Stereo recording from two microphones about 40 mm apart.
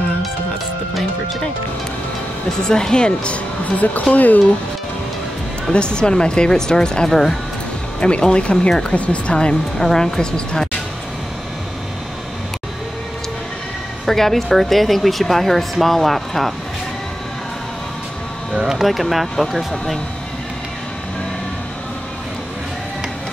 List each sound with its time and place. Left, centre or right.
2.6 s speech: centre
3.7 s speech: left
5.7 s speech: left
7.1 s speech: centre
8.0 s speech: left
9.3 s speech: left
9.8 s speech: centre
14.0 s speech: centre
18.5 s speech: centre
18.8 s speech: centre